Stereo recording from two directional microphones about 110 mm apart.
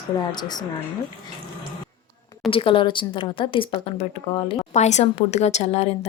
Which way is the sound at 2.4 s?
55° left (ahead or behind).